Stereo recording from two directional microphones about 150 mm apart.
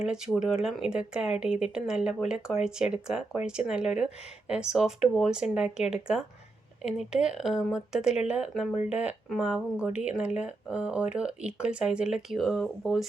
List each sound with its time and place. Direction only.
0.0 s speech: 5° right (ahead or behind)